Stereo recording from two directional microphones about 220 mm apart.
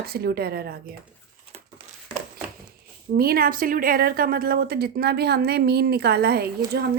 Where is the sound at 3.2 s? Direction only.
40° right (ahead or behind).